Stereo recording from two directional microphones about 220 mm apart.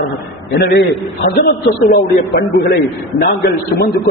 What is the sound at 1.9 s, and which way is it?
Speech, 45° left (ahead or behind).